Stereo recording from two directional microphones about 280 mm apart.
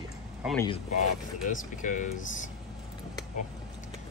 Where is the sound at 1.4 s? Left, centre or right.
Left.